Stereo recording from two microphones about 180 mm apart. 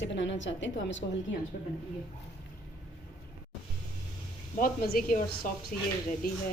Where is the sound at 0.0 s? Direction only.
90° left.